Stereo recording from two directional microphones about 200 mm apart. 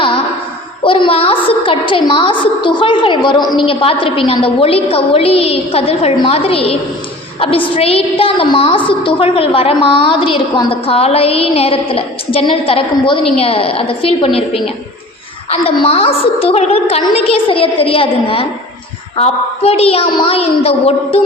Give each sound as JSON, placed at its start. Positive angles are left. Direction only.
{"t": 0.9, "sound": "a woman's voice", "side_deg": 25}